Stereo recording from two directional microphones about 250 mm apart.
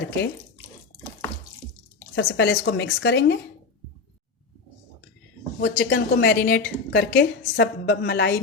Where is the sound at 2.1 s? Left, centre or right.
Left.